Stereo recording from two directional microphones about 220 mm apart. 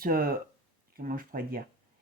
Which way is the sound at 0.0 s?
40° right (ahead or behind).